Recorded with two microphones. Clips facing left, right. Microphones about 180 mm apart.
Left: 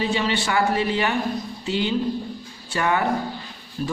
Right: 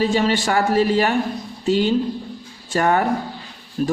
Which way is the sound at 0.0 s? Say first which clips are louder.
Right 5 dB; 45° right (ahead or behind).